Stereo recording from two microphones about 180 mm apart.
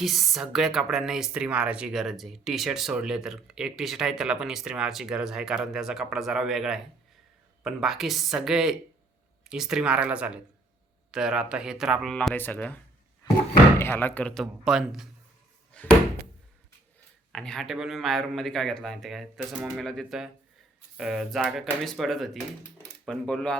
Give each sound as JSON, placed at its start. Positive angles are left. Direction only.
{"t": 0.0, "sound": "speech", "side_deg": 0}
{"t": 17.3, "sound": "speech", "side_deg": 5}